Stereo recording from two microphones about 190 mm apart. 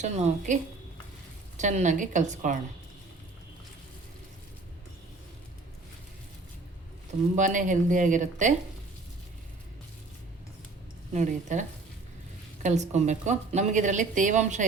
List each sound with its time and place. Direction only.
0.0 s a woman's voice: 40° right (ahead or behind)
7.3 s a woman's voice: 40° right (ahead or behind)
11.1 s a woman's voice: 40° right (ahead or behind)
12.6 s a woman's voice: 35° right (ahead or behind)